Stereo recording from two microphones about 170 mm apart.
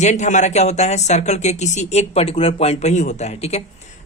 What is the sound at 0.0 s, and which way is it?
A man's voice, 45° left (ahead or behind).